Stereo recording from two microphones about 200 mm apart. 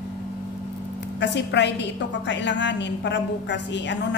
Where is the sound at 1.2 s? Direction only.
60° left (ahead or behind).